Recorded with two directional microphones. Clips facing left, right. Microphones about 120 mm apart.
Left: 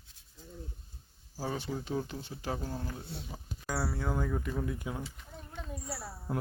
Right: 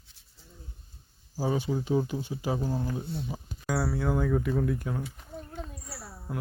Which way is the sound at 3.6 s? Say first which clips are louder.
Right 6 dB; 5° right (ahead or behind).